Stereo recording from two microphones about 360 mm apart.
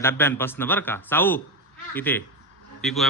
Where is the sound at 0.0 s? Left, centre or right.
Centre.